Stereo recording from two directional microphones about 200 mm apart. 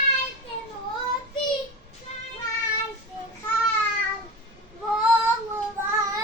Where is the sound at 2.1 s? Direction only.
35° left (ahead or behind).